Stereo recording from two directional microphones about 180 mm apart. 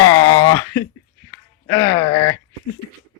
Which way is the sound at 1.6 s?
20° left (ahead or behind).